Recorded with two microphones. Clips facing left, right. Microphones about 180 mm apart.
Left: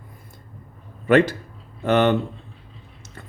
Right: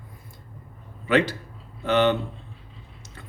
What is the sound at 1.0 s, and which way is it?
A man's voice, 50° left (ahead or behind).